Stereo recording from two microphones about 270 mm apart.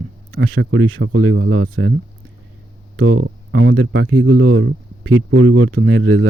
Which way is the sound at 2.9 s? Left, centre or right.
Right.